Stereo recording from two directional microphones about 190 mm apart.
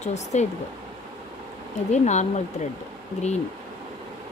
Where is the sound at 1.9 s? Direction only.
35° left (ahead or behind).